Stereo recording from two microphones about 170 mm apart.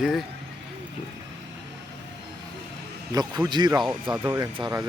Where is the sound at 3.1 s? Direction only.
25° right (ahead or behind).